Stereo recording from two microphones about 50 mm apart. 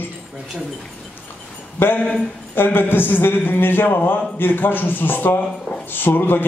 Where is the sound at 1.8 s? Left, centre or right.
Left.